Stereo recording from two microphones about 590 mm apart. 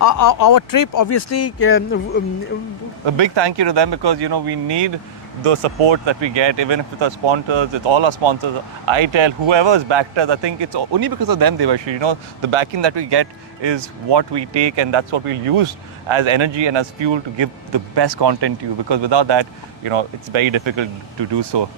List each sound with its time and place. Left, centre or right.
0.0 s speech: left
3.1 s speech: right
5.4 s speech: right